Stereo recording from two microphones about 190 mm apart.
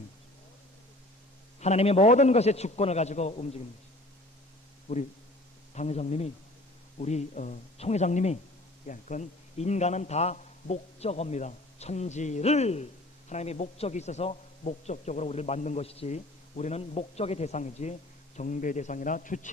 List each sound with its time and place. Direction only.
1.5 s a man's voice: 35° left (ahead or behind)
4.9 s a man's voice: 35° left (ahead or behind)